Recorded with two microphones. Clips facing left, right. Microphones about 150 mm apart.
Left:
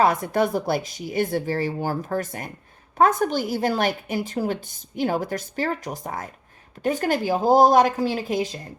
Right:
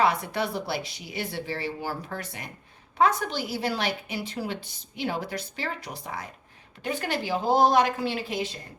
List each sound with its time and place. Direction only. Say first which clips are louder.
0.0 s a woman's voice: left 5 dB; 45° left (ahead or behind)